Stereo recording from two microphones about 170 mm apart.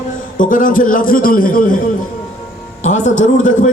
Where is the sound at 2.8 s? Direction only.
45° left (ahead or behind).